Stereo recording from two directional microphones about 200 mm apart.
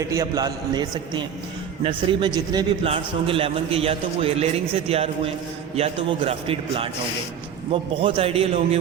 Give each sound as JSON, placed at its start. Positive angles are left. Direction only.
{"t": 0.1, "sound": "a man's voice", "side_deg": -15}